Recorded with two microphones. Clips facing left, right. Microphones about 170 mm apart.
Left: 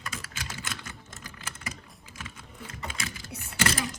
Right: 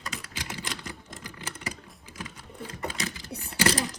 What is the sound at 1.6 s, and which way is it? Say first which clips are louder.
Typing: right 3 dB; 30° right (ahead or behind).